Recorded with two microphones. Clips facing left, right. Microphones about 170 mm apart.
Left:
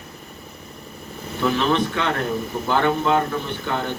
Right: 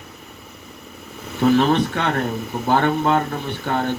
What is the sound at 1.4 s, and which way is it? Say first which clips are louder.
A man's voice: right 4 dB; 55° right (ahead or behind).